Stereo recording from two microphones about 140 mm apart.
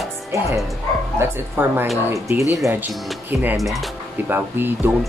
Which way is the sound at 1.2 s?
15° right (ahead or behind).